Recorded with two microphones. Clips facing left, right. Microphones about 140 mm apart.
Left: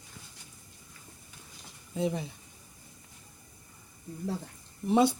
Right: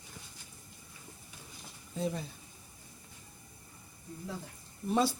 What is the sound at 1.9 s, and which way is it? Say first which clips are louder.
Speech: left 4 dB; 15° left (ahead or behind).